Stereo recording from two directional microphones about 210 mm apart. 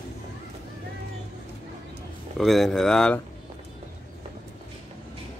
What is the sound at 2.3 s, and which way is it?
Speech, centre (ahead or behind).